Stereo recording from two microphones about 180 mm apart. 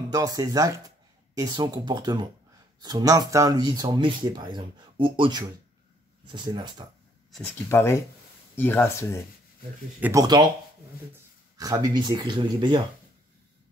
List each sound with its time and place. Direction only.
0.1 s speech: 20° right (ahead or behind)
7.7 s speech: 15° left (ahead or behind)
9.9 s speech: 10° right (ahead or behind)
11.5 s speech: 20° right (ahead or behind)